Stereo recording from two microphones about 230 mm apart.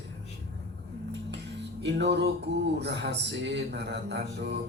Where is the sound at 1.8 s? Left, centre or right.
Right.